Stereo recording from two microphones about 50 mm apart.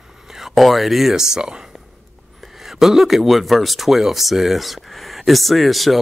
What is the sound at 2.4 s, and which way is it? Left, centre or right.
Speech, centre.